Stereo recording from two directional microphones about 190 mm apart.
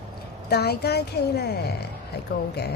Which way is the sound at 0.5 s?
60° left (ahead or behind).